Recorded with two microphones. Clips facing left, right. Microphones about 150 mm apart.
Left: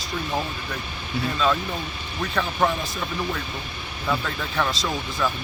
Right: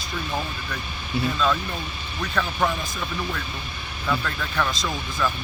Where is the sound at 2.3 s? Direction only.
Centre (ahead or behind).